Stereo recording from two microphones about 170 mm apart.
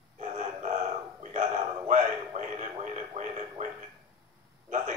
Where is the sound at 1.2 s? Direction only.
45° right (ahead or behind).